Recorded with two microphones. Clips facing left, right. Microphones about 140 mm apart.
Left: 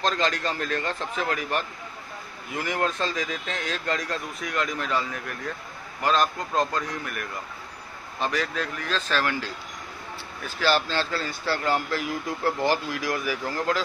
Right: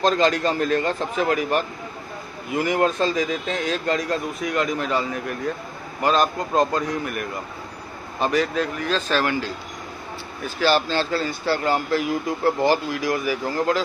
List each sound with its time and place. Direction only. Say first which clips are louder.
0.0 s speech: right 7 dB; 10° right (ahead or behind)
6.0 s speech: right 4 dB; 5° right (ahead or behind)
8.2 s speech: right 6 dB; 10° right (ahead or behind)
10.6 s speech: right 4 dB; 5° right (ahead or behind)